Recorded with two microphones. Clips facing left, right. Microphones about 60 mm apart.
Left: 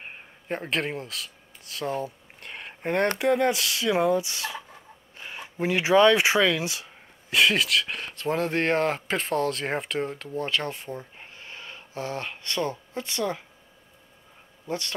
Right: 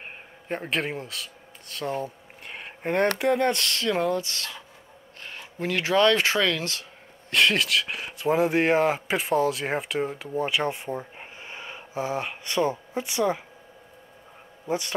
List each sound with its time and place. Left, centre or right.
0.0 s a sound: centre
3.2 s speech: centre
14.7 s speech: centre